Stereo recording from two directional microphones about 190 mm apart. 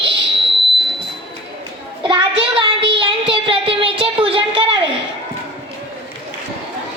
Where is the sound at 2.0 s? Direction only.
25° right (ahead or behind).